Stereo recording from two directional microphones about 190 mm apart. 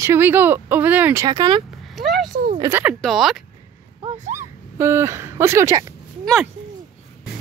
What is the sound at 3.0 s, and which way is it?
Speech, centre (ahead or behind).